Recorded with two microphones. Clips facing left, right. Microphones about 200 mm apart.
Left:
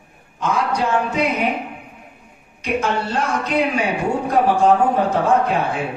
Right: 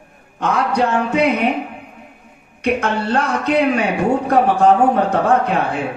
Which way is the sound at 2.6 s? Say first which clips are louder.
Right 3 dB; 60° right (ahead or behind).